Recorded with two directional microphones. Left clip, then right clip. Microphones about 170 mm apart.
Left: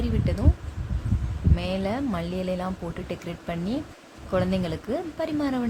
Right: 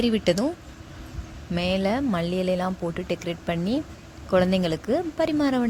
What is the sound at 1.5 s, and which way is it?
A woman's voice, 25° right (ahead or behind).